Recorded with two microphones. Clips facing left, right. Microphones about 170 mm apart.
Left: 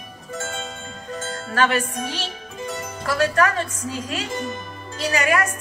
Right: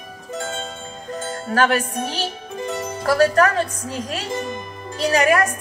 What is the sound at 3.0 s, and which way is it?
Speech, 40° right (ahead or behind).